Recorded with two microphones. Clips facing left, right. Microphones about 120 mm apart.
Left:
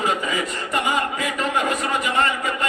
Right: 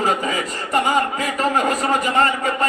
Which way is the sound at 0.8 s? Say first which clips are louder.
Right 3 dB; 40° right (ahead or behind).